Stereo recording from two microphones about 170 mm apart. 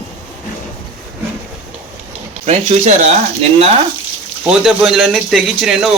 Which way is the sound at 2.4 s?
40° right (ahead or behind).